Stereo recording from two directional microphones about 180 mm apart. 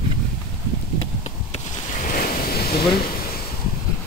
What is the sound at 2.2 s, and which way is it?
Waves, 60° left (ahead or behind).